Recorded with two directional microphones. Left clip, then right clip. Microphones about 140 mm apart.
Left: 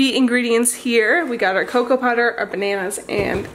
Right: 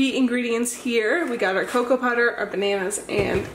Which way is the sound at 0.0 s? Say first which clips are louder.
Left 5 dB; 30° left (ahead or behind).